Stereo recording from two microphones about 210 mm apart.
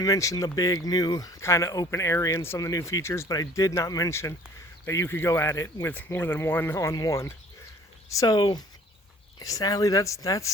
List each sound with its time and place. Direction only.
0.0 s speech: 15° left (ahead or behind)